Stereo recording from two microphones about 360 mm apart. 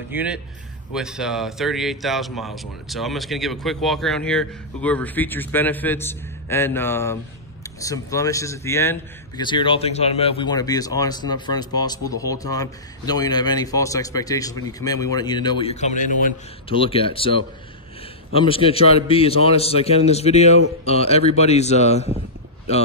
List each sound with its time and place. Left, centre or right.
0.1 s speech: centre